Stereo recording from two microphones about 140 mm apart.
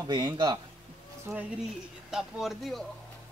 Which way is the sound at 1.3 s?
15° right (ahead or behind).